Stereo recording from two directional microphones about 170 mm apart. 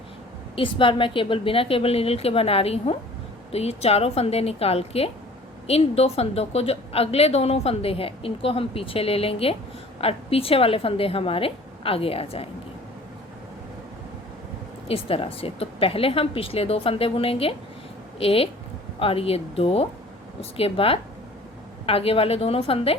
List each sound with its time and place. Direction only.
0.5 s a woman's voice: 30° left (ahead or behind)
14.8 s a woman's voice: 35° left (ahead or behind)